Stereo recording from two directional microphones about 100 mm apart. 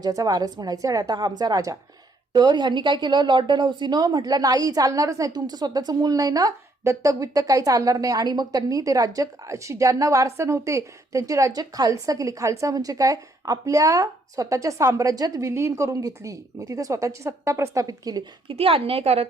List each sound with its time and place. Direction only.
0.0 s a woman's voice: 40° right (ahead or behind)
18.4 s a woman's voice: 70° right (ahead or behind)